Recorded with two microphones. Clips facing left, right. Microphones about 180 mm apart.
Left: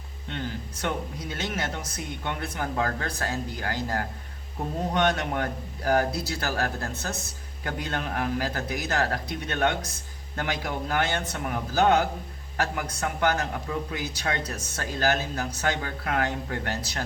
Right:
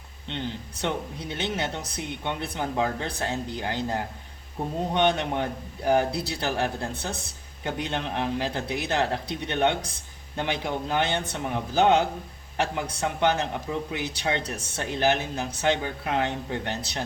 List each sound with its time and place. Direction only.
0.3 s speech: 25° right (ahead or behind)